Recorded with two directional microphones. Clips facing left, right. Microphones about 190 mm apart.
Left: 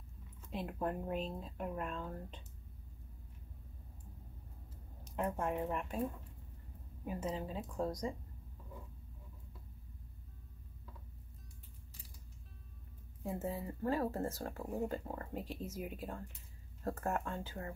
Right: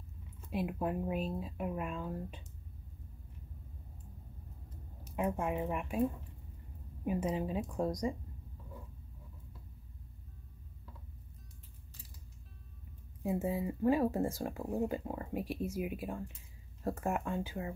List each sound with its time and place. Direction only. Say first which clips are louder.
0.5 s speech: right 4 dB; 10° right (ahead or behind)
5.0 s speech: right 3 dB; 5° right (ahead or behind)
7.1 s speech: right 6 dB; 15° right (ahead or behind)
13.2 s speech: right 6 dB; 10° right (ahead or behind)